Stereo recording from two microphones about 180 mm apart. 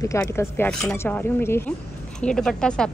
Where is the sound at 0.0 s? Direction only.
15° left (ahead or behind).